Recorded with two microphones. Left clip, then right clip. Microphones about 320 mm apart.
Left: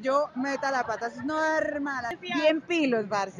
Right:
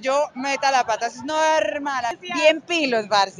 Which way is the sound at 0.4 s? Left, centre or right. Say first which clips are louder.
Right 8 dB; right.